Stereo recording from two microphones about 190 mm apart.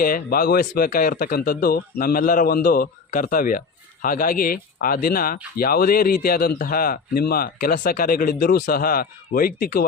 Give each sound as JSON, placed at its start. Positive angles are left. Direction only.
{"t": 0.0, "sound": "a man's voice", "side_deg": 50}